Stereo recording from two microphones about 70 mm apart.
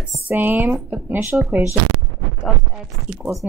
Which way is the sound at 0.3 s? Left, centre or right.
Right.